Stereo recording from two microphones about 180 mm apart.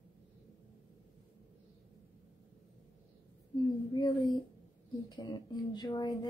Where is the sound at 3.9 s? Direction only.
20° left (ahead or behind).